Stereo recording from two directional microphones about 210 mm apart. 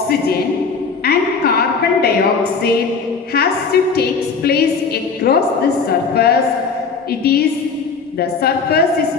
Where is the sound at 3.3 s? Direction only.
50° left (ahead or behind).